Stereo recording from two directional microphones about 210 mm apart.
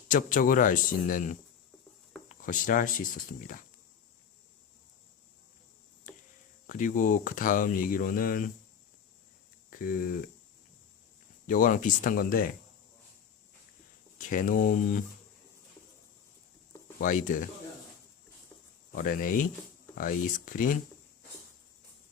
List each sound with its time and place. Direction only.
0.1 s speech: 40° left (ahead or behind)
2.4 s speech: 40° left (ahead or behind)
6.7 s speech: 40° left (ahead or behind)
9.6 s speech: 40° left (ahead or behind)
11.4 s speech: 40° left (ahead or behind)
14.2 s speech: 40° left (ahead or behind)
17.0 s speech: 40° left (ahead or behind)
18.9 s speech: 40° left (ahead or behind)